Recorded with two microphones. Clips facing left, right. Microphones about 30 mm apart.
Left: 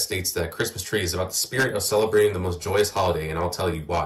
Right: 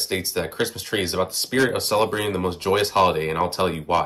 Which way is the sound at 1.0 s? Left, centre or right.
Right.